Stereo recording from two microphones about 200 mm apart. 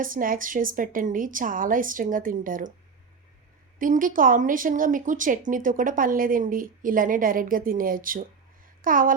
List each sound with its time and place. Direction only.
0.0 s speech: 45° right (ahead or behind)
3.8 s speech: 40° right (ahead or behind)
8.6 s a sound: 45° right (ahead or behind)